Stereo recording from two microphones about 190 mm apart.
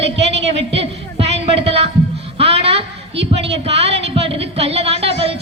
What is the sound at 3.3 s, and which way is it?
A woman's voice, 30° right (ahead or behind).